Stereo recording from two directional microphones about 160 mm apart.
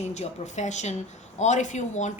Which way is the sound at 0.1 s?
45° left (ahead or behind).